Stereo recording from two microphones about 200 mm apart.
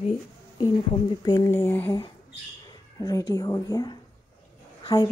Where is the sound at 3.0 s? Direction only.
15° left (ahead or behind).